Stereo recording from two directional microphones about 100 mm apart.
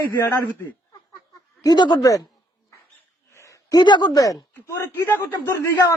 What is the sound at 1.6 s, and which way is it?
Speech, 40° left (ahead or behind).